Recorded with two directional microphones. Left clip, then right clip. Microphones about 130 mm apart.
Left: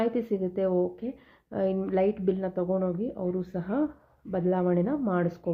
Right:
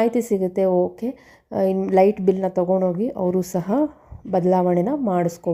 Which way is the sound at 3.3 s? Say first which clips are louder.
Right 9 dB; 60° right (ahead or behind).